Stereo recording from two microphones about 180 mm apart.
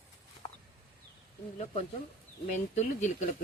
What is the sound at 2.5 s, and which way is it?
Speech, 40° left (ahead or behind).